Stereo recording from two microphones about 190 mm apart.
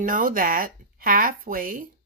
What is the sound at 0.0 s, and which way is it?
Speech, 45° right (ahead or behind).